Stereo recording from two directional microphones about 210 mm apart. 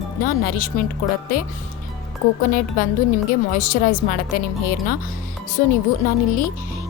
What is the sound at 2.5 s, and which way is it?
A woman's voice, 40° left (ahead or behind).